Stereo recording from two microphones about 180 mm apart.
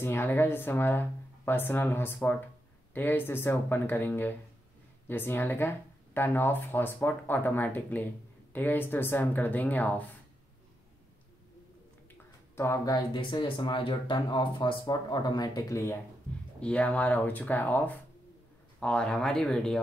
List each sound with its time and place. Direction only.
0.0 s speech: 10° left (ahead or behind)
12.5 s speech: 15° left (ahead or behind)
16.5 s speech: 5° left (ahead or behind)